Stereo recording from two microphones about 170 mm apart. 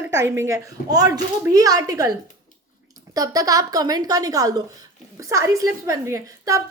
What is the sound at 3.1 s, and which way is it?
A woman's voice, 20° right (ahead or behind).